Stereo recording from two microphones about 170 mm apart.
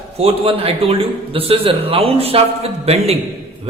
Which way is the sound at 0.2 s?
35° right (ahead or behind).